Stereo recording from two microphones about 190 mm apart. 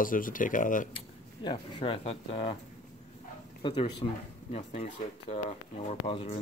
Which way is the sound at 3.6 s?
25° left (ahead or behind).